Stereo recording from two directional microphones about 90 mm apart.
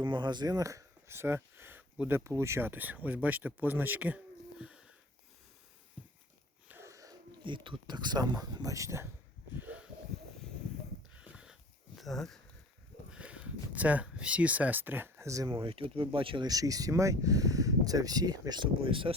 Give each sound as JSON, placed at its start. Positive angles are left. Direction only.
{"t": 0.0, "sound": "speech", "side_deg": -55}
{"t": 2.2, "sound": "speech", "side_deg": -35}
{"t": 6.8, "sound": "wheeze", "side_deg": -40}
{"t": 7.4, "sound": "speech", "side_deg": -65}
{"t": 9.6, "sound": "a sound", "side_deg": -15}
{"t": 11.2, "sound": "a sound", "side_deg": -10}
{"t": 11.9, "sound": "speech", "side_deg": 0}
{"t": 13.1, "sound": "a sound", "side_deg": -15}
{"t": 15.4, "sound": "speech", "side_deg": -75}
{"t": 16.5, "sound": "speech", "side_deg": -40}
{"t": 18.8, "sound": "speech", "side_deg": -80}